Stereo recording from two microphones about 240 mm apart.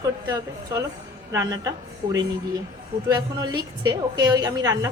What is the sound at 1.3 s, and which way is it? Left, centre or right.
Speech, centre.